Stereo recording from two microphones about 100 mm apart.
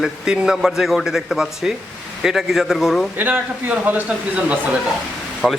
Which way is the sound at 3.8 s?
15° right (ahead or behind).